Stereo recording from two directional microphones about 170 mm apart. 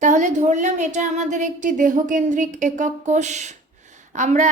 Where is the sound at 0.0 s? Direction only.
45° right (ahead or behind).